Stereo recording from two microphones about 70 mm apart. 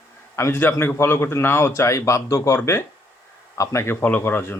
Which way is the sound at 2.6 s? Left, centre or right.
Left.